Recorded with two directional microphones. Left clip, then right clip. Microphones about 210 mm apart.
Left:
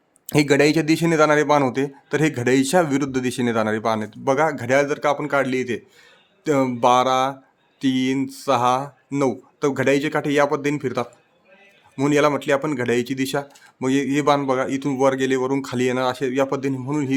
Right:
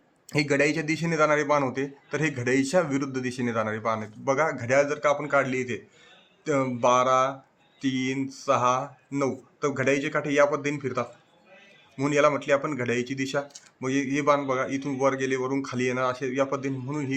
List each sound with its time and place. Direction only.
0.3 s a man's voice: 55° left (ahead or behind)